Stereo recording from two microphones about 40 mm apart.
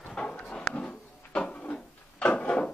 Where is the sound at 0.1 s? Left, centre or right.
Left.